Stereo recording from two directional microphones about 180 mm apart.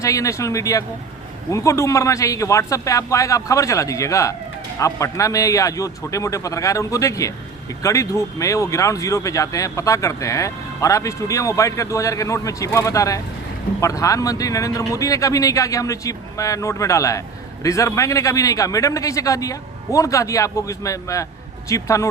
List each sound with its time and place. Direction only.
0.0 s speech: 20° left (ahead or behind)